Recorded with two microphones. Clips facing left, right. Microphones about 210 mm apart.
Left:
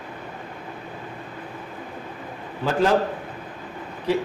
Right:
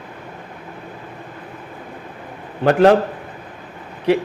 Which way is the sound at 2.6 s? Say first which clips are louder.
Right 8 dB; 70° right (ahead or behind).